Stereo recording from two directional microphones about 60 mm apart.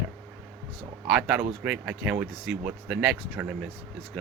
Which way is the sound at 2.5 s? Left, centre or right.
Centre.